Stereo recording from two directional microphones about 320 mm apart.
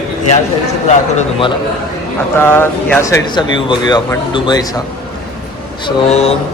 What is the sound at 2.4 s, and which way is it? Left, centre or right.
Speech, centre.